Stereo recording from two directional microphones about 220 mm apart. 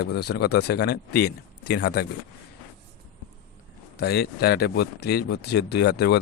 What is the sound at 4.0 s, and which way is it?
Speech, 45° left (ahead or behind).